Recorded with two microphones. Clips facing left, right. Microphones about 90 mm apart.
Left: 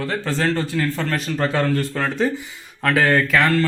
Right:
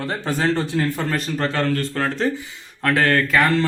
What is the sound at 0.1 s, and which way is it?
Speech, 15° right (ahead or behind).